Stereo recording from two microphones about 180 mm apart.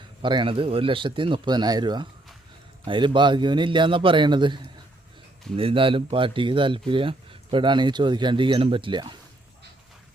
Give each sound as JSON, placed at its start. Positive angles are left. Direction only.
{"t": 0.2, "sound": "speech", "side_deg": -25}